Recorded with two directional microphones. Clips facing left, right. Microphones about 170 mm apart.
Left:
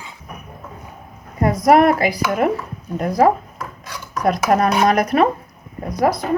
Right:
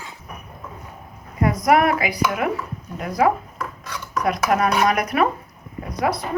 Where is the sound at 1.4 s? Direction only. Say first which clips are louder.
Left 4 dB; 35° left (ahead or behind).